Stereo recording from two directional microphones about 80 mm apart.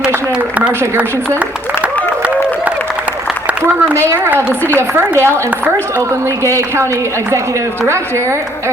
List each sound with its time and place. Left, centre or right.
3.9 s a woman's voice: right
6.4 s a woman's voice: right